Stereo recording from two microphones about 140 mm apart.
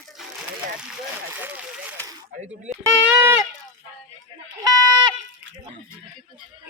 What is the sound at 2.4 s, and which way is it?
Speech, 60° right (ahead or behind).